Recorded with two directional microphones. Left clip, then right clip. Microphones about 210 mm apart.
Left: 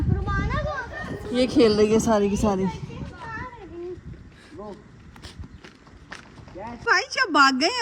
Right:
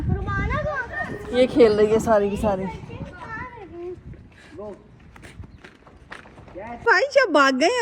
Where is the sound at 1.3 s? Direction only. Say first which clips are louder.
Right 3 dB; 10° left (ahead or behind).